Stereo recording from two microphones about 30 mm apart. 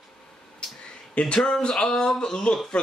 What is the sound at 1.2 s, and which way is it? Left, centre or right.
Speech, left.